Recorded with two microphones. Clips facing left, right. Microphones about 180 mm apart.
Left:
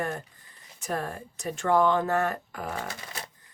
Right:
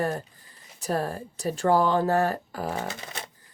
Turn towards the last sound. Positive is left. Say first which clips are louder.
# right 3 dB
turn(degrees=-20)  # may be behind; listen again after turning